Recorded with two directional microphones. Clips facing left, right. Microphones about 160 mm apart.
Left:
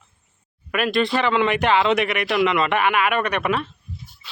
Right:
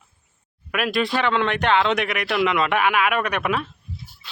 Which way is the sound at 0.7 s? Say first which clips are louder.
Left 2 dB; centre (ahead or behind).